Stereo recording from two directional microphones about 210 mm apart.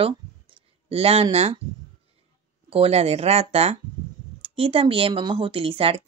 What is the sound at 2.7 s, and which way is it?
Speech, 30° right (ahead or behind).